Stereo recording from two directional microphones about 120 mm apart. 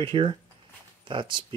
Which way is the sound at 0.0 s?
45° right (ahead or behind).